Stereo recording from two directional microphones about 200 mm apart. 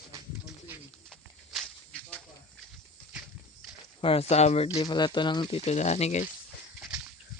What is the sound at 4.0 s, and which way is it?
Speech, 30° left (ahead or behind).